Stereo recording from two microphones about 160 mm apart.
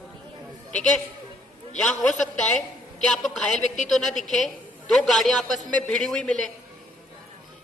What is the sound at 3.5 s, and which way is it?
Speech, 50° left (ahead or behind).